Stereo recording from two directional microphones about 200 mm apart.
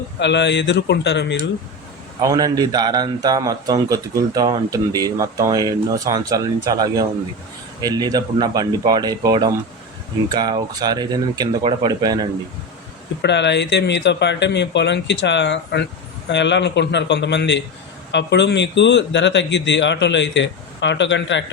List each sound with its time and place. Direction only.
0.2 s speech: 60° left (ahead or behind)
2.2 s speech: 20° right (ahead or behind)
13.2 s speech: 60° left (ahead or behind)